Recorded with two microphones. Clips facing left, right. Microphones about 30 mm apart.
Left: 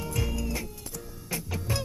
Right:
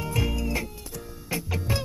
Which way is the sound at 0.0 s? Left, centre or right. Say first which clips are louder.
Right 4 dB; centre.